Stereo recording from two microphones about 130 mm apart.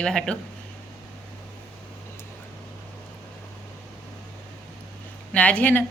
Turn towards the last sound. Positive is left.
turn(degrees=15)  # may be behind; listen again after turning